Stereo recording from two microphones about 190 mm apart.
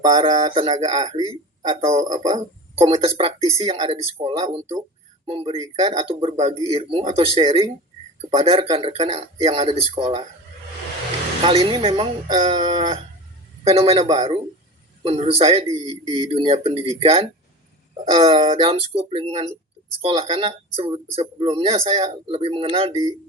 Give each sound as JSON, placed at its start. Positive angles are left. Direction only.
{"t": 0.0, "sound": "speech", "side_deg": -25}
{"t": 11.4, "sound": "speech", "side_deg": -25}